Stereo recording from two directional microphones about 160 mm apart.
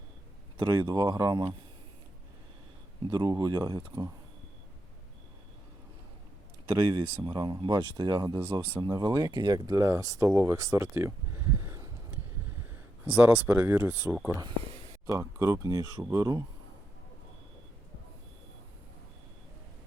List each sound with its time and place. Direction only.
0.5 s speech: 25° right (ahead or behind)
3.1 s speech: 25° right (ahead or behind)
6.7 s speech: 25° right (ahead or behind)
13.1 s speech: 10° right (ahead or behind)